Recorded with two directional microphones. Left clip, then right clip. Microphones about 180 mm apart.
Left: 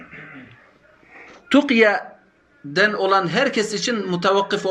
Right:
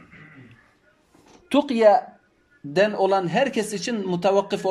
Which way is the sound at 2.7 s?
45° right (ahead or behind).